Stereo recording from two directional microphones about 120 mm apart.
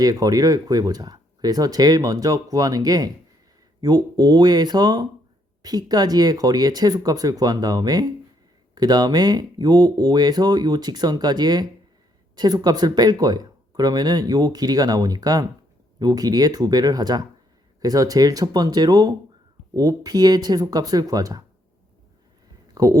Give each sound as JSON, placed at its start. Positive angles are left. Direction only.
{"t": 0.0, "sound": "speech", "side_deg": -30}
{"t": 22.7, "sound": "speech", "side_deg": -30}